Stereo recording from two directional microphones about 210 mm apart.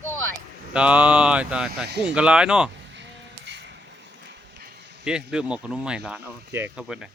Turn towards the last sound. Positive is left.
turn(degrees=-5)  # may be behind; listen again after turning